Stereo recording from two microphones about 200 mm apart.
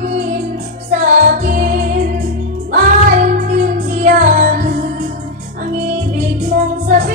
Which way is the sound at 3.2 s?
40° right (ahead or behind).